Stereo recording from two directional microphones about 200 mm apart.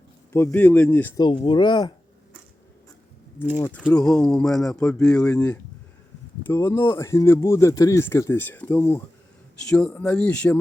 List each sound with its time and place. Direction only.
0.3 s speech: 10° left (ahead or behind)
1.1 s speech: 20° left (ahead or behind)
3.6 s speech: 10° left (ahead or behind)
6.5 s speech: 10° left (ahead or behind)